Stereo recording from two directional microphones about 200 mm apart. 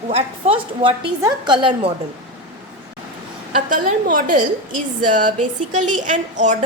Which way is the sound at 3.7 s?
40° right (ahead or behind).